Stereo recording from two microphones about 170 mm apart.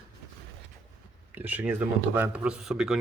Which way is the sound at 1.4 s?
10° right (ahead or behind).